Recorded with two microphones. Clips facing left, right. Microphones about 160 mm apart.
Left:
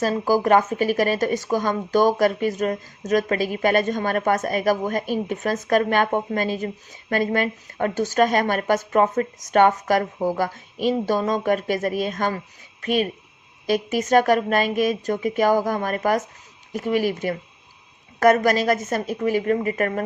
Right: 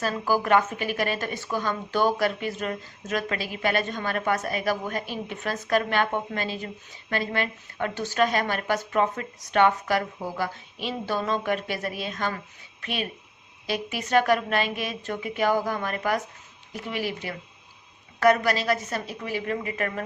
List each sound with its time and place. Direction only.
0.0 s speech: 40° left (ahead or behind)